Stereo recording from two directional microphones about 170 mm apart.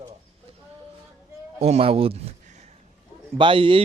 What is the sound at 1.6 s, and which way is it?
Speech, 40° right (ahead or behind).